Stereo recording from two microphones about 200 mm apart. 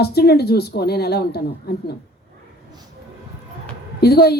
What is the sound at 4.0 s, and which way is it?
Speech, 50° left (ahead or behind).